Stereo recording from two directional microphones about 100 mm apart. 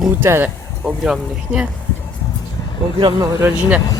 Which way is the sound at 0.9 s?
5° right (ahead or behind).